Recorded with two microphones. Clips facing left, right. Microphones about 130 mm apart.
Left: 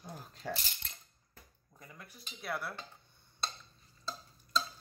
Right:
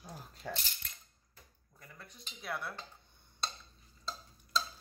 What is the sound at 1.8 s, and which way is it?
Speech, 10° left (ahead or behind).